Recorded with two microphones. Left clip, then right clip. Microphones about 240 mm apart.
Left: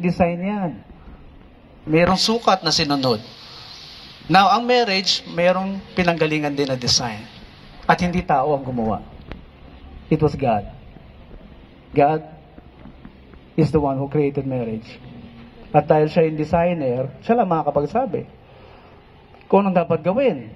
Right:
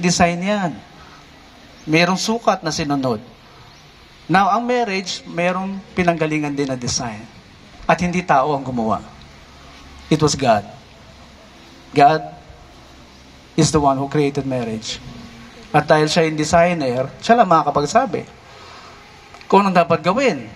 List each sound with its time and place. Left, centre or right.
0.0 s a man's voice: right
2.0 s a man's voice: right
4.3 s a man's voice: right
8.5 s a man's voice: right
10.0 s a man's voice: right
11.9 s a man's voice: right
13.6 s a man's voice: right
15.9 s a man's voice: right
17.8 s speech: right
19.4 s speech: right